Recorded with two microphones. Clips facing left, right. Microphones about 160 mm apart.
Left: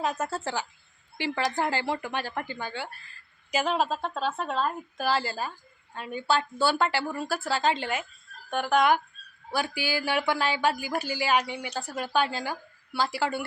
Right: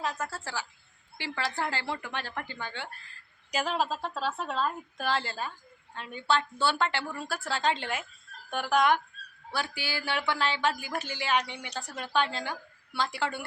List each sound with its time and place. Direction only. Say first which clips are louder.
0.0 s a woman's voice: left 5 dB; 20° left (ahead or behind); by 3.8 s centre (ahead or behind)
3.8 s speech: left 3 dB; 50° left (ahead or behind)
4.9 s a woman's voice: left 4 dB; 5° left (ahead or behind)